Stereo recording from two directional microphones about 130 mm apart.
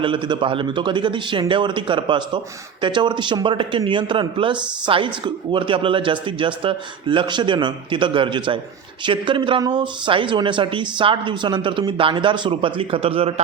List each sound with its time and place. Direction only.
0.0 s a man's voice: 40° right (ahead or behind)